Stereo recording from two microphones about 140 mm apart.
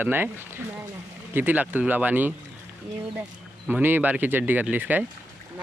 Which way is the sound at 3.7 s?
15° right (ahead or behind).